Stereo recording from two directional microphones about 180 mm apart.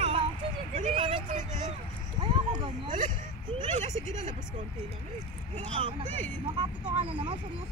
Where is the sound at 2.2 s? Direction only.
25° right (ahead or behind).